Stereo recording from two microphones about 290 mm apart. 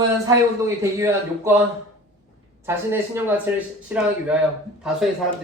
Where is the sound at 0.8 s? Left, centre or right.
Centre.